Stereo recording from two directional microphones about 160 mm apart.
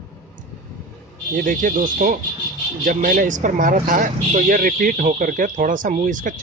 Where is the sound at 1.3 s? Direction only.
55° right (ahead or behind).